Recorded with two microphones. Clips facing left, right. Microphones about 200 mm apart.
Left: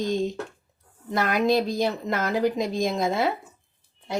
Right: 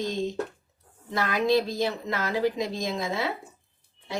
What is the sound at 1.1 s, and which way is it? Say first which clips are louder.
A woman's voice: left 2 dB; 50° left (ahead or behind).